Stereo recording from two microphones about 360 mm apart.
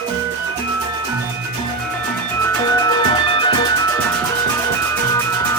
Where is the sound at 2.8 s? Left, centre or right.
Centre.